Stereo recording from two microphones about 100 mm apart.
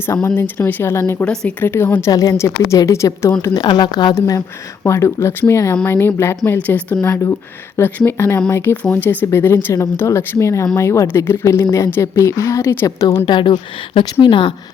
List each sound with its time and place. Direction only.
0.3 s a woman's voice: 20° left (ahead or behind)
1.2 s speech: 10° left (ahead or behind)
1.6 s a woman's voice: 25° left (ahead or behind)
2.0 s a woman's voice: 35° left (ahead or behind)
3.4 s speech: 40° left (ahead or behind)
4.1 s a woman's voice: 35° left (ahead or behind)
6.6 s speech: 15° left (ahead or behind)
7.0 s a woman's voice: 25° left (ahead or behind)
13.2 s speech: 50° left (ahead or behind)